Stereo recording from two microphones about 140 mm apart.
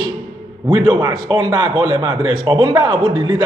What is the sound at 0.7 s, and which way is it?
A man's voice, 30° right (ahead or behind).